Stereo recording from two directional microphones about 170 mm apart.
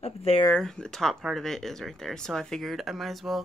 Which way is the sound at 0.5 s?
5° left (ahead or behind).